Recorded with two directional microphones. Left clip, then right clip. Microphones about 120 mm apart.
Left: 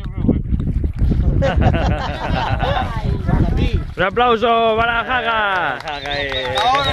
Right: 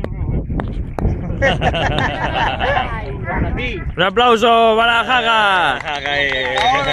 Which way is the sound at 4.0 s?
10° right (ahead or behind).